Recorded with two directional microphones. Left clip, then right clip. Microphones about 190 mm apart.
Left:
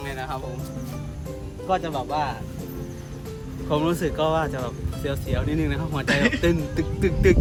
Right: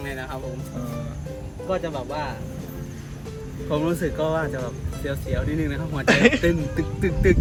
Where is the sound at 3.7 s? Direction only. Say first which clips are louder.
Left 1 dB; 30° left (ahead or behind).